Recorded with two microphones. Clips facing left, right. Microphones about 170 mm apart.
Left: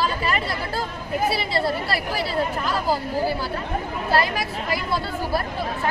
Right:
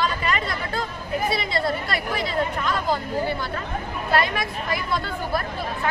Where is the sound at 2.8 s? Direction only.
5° left (ahead or behind).